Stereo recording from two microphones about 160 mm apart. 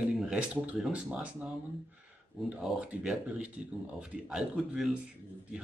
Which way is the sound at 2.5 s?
5° right (ahead or behind).